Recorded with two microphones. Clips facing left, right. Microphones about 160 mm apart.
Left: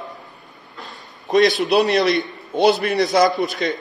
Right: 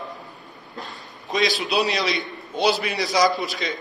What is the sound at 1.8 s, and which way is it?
A man's voice, 50° left (ahead or behind).